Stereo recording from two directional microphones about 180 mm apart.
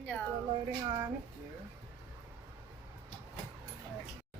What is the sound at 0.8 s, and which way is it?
Speech, 20° right (ahead or behind).